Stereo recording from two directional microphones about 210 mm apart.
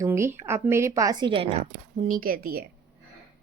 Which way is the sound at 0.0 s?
15° right (ahead or behind).